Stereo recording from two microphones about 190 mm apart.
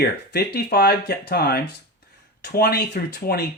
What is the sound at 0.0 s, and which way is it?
Speech, 55° left (ahead or behind).